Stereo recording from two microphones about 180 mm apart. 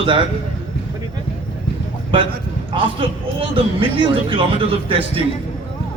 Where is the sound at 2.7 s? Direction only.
30° right (ahead or behind).